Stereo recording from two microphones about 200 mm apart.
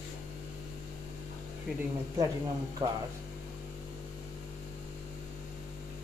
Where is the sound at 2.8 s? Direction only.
25° right (ahead or behind).